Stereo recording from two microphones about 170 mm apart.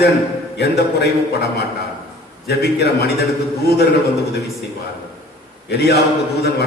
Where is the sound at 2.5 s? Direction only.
70° left (ahead or behind).